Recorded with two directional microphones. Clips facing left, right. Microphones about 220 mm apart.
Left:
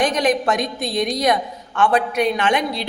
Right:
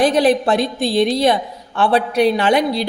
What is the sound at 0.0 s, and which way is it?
A woman's voice, 35° right (ahead or behind).